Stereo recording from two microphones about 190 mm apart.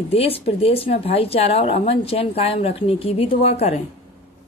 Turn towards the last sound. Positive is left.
turn(degrees=35)  # may be behind; listen again after turning